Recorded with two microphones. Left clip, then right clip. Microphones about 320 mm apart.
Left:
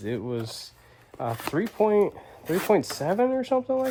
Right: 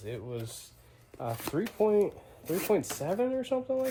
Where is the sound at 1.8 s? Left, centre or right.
Left.